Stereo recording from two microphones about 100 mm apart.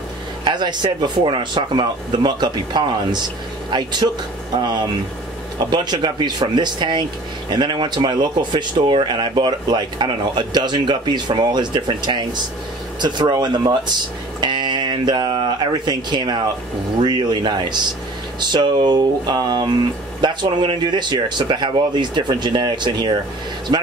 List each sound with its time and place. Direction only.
0.5 s speech: 50° right (ahead or behind)